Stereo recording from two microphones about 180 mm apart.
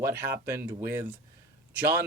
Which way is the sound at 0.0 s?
15° right (ahead or behind).